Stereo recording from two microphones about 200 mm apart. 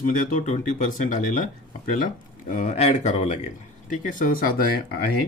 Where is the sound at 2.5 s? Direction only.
40° left (ahead or behind).